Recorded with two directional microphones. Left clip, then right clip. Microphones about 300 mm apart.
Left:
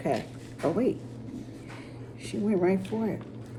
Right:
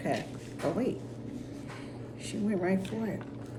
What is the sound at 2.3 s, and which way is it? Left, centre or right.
Speech, centre.